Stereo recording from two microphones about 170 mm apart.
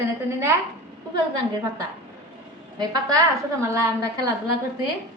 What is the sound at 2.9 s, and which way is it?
A woman's voice, 20° right (ahead or behind).